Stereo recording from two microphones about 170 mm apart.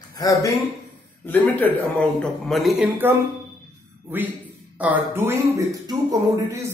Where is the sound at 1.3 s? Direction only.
10° left (ahead or behind).